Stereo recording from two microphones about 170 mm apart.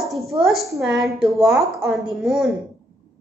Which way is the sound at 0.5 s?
Centre (ahead or behind).